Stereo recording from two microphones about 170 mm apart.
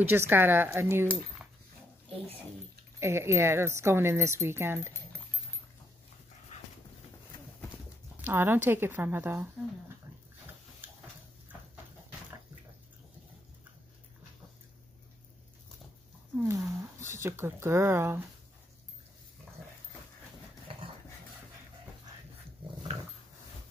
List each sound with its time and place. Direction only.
0.1 s speech: 10° right (ahead or behind)
3.0 s speech: 15° right (ahead or behind)
6.5 s dog: 45° left (ahead or behind)
8.2 s speech: 10° right (ahead or behind)
16.3 s speech: 15° right (ahead or behind)